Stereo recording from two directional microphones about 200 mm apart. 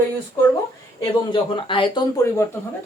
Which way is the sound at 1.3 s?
25° left (ahead or behind).